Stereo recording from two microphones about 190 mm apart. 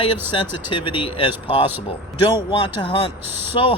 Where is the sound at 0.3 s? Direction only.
25° left (ahead or behind).